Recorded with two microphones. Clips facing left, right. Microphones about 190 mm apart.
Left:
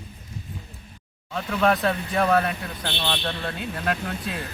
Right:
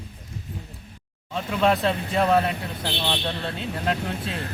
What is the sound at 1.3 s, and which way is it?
Speech, 20° right (ahead or behind).